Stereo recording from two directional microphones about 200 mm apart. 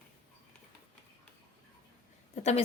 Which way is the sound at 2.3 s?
30° left (ahead or behind).